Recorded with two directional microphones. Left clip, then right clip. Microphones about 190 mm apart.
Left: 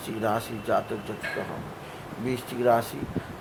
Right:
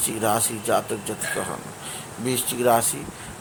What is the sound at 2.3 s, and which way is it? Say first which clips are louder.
Speech: right 3 dB; 20° right (ahead or behind).